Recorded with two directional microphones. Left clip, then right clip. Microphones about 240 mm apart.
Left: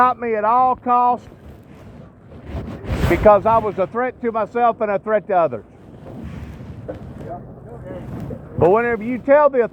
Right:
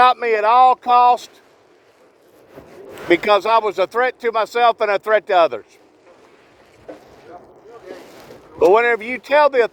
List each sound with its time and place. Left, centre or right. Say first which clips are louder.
0.0 s speech: right 3 dB; right
3.1 s speech: left 2 dB; right
3.5 s speech: right 1 dB; right
8.5 s speech: right 2 dB; right